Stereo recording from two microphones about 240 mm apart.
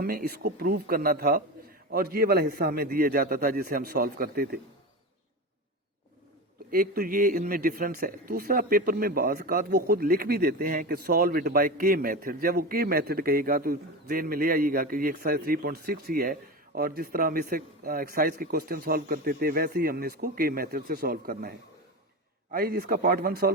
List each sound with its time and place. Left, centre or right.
0.0 s speech: right
6.7 s speech: right
22.5 s speech: right